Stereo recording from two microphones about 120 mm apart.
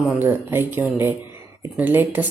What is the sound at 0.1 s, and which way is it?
Speech, 20° right (ahead or behind).